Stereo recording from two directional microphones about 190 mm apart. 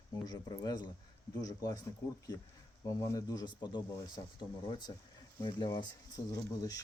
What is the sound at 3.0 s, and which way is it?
Speech, 15° left (ahead or behind).